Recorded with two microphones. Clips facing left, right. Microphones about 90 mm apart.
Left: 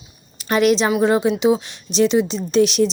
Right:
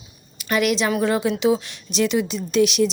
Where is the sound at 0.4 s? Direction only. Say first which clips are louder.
Left 4 dB; 30° left (ahead or behind).